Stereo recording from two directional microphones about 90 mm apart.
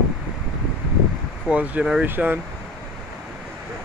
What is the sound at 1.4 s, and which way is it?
Speech, 15° right (ahead or behind).